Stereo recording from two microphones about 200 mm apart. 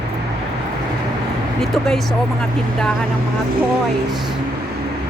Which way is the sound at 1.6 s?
Centre (ahead or behind).